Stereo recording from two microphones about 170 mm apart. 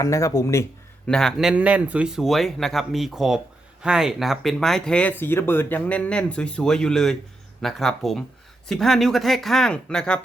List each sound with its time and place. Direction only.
0.0 s speech: 20° left (ahead or behind)
1.0 s speech: 5° left (ahead or behind)